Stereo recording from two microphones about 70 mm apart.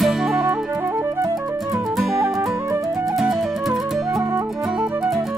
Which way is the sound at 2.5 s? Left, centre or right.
Right.